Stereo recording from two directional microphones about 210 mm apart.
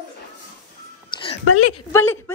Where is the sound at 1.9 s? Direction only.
10° left (ahead or behind).